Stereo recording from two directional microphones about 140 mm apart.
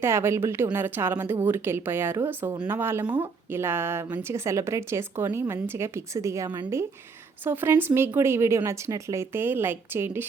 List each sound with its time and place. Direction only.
0.0 s a woman's voice: 20° right (ahead or behind)